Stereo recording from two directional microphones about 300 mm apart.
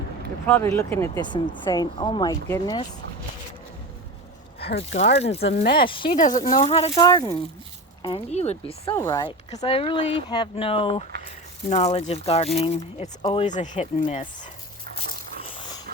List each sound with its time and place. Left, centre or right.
0.4 s speech: centre
4.8 s speech: left
14.9 s a sound: centre